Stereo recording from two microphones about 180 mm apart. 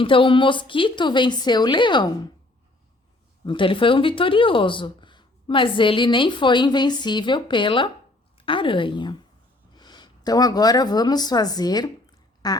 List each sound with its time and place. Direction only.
0.0 s speech: 30° left (ahead or behind)
3.4 s speech: 25° left (ahead or behind)